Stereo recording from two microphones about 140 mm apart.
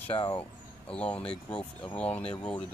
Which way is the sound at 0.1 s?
40° left (ahead or behind).